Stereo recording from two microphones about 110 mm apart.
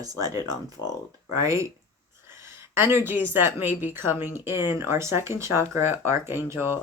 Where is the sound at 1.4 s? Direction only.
30° right (ahead or behind).